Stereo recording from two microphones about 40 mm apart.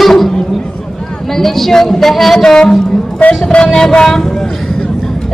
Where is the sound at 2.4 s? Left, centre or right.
Centre.